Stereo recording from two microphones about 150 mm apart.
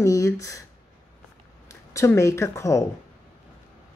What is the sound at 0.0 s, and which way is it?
Speech, 20° left (ahead or behind).